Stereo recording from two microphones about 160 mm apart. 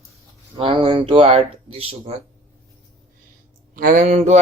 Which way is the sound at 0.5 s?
30° right (ahead or behind).